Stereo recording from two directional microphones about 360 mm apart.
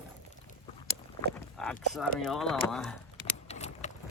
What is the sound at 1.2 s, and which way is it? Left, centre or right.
Speech, centre.